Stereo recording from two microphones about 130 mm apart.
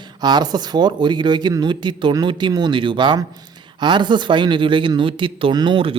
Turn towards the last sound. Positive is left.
turn(degrees=-40)  # may be behind; listen again after turning